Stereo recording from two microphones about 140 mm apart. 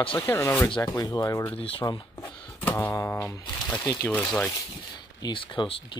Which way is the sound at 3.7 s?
15° left (ahead or behind).